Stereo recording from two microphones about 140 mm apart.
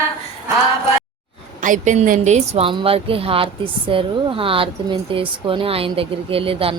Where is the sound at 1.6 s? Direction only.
65° right (ahead or behind).